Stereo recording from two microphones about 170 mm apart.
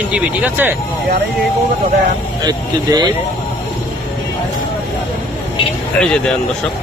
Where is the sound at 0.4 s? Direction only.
10° right (ahead or behind).